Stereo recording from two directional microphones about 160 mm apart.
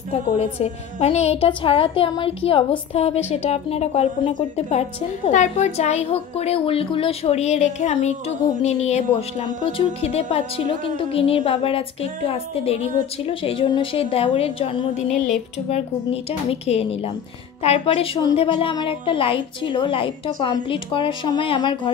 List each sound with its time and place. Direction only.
0.1 s a woman's voice: 40° left (ahead or behind)
9.6 s a woman's voice: 35° left (ahead or behind)
15.0 s speech: centre (ahead or behind)
15.7 s a woman's voice: 40° left (ahead or behind)